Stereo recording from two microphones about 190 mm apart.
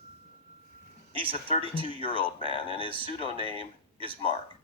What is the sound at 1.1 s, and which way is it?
Speech, 30° right (ahead or behind).